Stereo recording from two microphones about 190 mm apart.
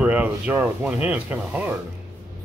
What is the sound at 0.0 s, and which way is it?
Speech, 5° right (ahead or behind).